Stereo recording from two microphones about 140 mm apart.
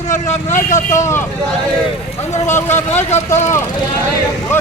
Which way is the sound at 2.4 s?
15° left (ahead or behind).